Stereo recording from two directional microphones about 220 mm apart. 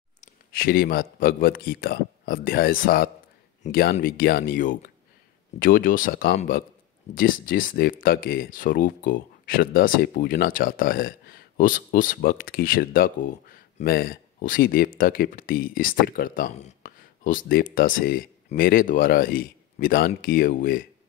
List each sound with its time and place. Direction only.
0.2 s speech: 40° left (ahead or behind)